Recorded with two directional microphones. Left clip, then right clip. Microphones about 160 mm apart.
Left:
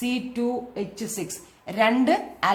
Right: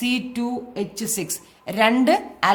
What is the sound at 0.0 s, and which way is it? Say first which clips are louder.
A woman's voice: right 2 dB; 45° right (ahead or behind).